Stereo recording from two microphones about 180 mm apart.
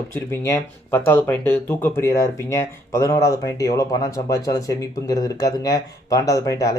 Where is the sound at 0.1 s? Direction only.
15° left (ahead or behind).